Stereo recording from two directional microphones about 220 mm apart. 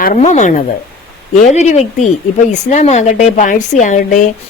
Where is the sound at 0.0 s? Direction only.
35° left (ahead or behind).